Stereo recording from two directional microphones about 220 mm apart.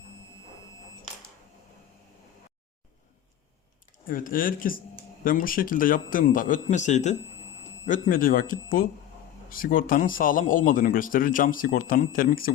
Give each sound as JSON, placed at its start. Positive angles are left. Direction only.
{"t": 4.0, "sound": "a man's voice", "side_deg": 40}